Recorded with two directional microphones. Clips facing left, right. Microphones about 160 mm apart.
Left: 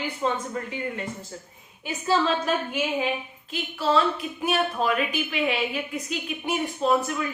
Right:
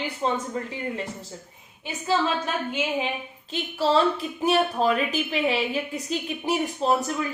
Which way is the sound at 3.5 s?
35° right (ahead or behind).